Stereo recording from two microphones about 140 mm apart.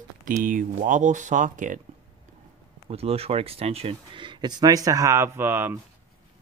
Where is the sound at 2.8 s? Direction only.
45° right (ahead or behind).